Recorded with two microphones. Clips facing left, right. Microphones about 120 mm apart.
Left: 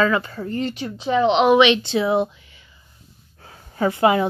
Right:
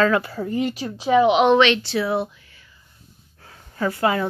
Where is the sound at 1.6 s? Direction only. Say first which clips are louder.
Left 2 dB; 20° left (ahead or behind).